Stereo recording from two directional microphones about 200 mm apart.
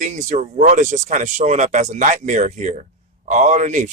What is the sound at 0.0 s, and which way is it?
Speech, 35° right (ahead or behind).